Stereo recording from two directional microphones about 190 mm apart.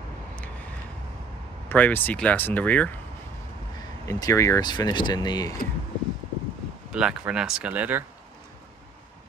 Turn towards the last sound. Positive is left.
turn(degrees=-10)  # may be behind; listen again after turning